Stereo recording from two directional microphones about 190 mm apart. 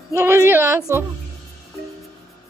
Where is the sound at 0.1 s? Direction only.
15° right (ahead or behind).